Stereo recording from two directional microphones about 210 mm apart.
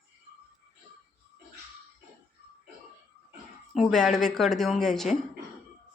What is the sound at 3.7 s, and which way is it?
Speech, centre (ahead or behind).